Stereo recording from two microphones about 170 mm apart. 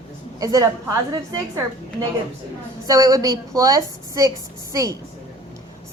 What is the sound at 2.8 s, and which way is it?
A woman's voice, 20° right (ahead or behind).